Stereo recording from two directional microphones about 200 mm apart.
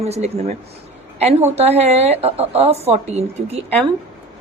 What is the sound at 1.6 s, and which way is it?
Speech, 30° right (ahead or behind).